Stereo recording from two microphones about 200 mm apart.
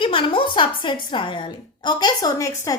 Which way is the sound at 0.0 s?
25° left (ahead or behind).